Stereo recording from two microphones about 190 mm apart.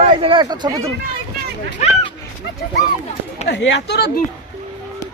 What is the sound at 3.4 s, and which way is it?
Speech, 70° left (ahead or behind).